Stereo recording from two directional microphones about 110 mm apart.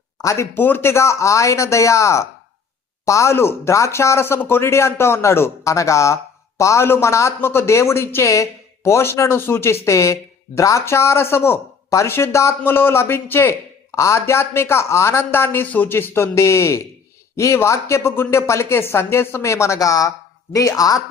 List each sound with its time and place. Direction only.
0.2 s speech: 25° left (ahead or behind)